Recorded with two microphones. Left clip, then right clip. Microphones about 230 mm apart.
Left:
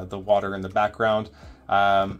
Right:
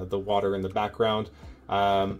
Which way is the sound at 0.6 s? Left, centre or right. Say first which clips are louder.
Left 4 dB; centre.